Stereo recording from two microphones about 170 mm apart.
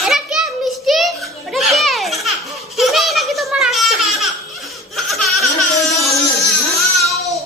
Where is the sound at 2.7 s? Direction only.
Centre (ahead or behind).